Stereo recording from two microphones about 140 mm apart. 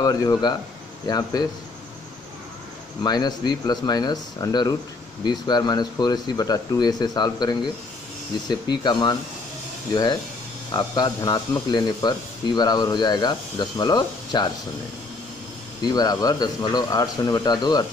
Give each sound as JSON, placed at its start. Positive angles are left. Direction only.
{"t": 0.0, "sound": "speech", "side_deg": 25}
{"t": 3.0, "sound": "speech", "side_deg": 30}
{"t": 10.7, "sound": "speech", "side_deg": 30}
{"t": 15.8, "sound": "speech", "side_deg": 30}